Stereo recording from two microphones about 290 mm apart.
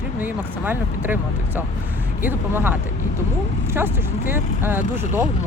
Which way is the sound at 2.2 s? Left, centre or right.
Centre.